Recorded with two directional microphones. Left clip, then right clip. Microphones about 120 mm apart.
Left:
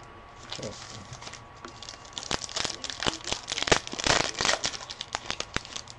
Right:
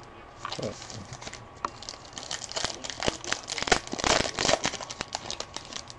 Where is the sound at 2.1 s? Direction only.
Centre (ahead or behind).